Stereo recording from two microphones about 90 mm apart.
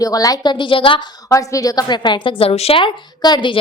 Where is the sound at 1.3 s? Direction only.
35° left (ahead or behind); by 2.9 s 90° left.